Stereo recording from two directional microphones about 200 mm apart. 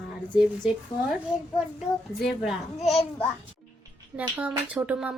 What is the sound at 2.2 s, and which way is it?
A child's voice, centre (ahead or behind).